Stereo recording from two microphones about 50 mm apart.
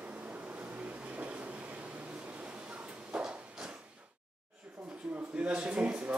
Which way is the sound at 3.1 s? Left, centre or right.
Right.